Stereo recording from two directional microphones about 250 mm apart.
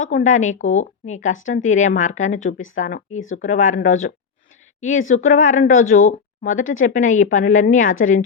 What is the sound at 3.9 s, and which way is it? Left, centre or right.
Speech, left.